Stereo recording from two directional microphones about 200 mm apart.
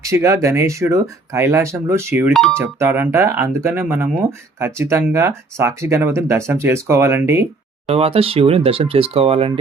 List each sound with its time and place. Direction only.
0.0 s speech: 15° right (ahead or behind); by 2.6 s centre (ahead or behind)
2.6 s speech: 10° right (ahead or behind)
7.9 s speech: 30° right (ahead or behind)